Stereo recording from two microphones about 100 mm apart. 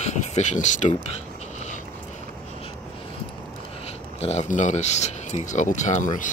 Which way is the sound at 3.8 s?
90° left.